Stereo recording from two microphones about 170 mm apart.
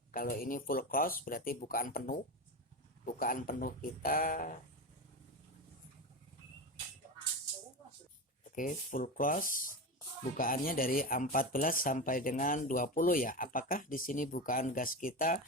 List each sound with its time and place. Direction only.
0.1 s speech: 55° left (ahead or behind)
8.5 s speech: 50° left (ahead or behind)